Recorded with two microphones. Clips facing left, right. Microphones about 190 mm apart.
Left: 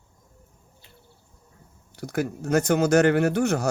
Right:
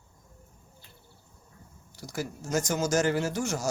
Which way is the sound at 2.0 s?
60° left (ahead or behind).